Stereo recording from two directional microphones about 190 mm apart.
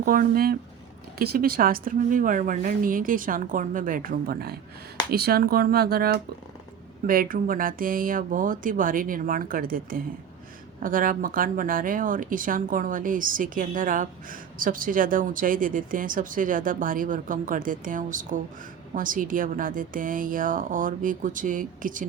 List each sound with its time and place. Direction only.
0.0 s speech: 50° right (ahead or behind)